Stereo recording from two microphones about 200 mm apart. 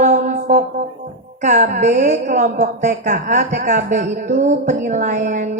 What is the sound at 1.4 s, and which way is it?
A woman's voice, 35° right (ahead or behind).